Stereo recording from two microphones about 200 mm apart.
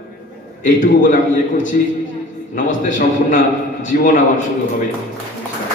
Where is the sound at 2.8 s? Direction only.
40° left (ahead or behind).